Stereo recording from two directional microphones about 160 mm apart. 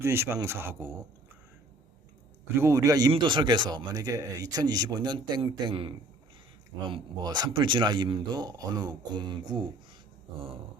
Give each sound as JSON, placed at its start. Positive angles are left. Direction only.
{"t": 0.0, "sound": "speech", "side_deg": -15}
{"t": 2.6, "sound": "speech", "side_deg": -20}